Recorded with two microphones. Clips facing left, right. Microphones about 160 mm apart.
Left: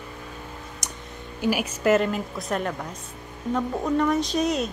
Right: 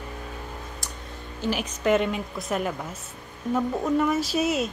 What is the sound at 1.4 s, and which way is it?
A woman's voice, 10° left (ahead or behind).